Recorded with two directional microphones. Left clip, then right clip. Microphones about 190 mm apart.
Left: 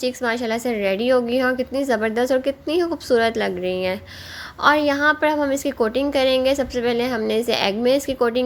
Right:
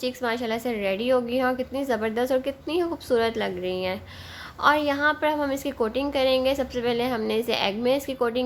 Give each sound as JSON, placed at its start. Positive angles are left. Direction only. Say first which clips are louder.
{"t": 0.0, "sound": "a woman's voice", "louder": "left 5 dB", "side_deg": 20}